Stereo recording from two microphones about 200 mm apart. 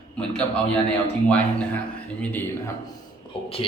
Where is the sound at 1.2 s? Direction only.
5° left (ahead or behind).